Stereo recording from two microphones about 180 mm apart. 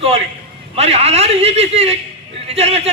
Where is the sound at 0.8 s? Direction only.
35° right (ahead or behind).